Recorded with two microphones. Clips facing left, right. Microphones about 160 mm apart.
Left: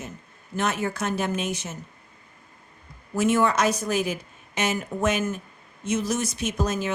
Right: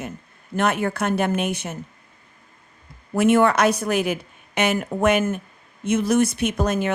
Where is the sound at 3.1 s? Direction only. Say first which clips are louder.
Right 5 dB; 60° right (ahead or behind).